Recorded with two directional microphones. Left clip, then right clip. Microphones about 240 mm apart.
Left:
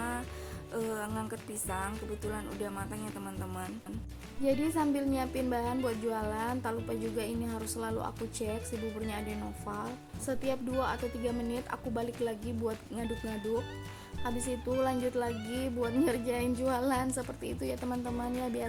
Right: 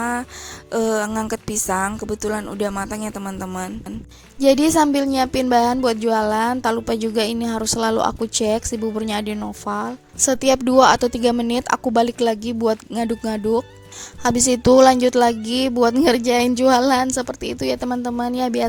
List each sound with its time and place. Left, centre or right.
0.0 s music: right
0.7 s a woman's voice: right